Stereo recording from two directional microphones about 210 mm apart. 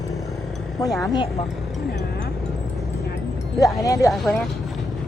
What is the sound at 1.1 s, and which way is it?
Speech, 25° left (ahead or behind).